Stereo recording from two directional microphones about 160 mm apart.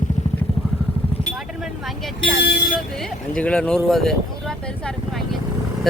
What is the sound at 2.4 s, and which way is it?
Vehicle, 90° left.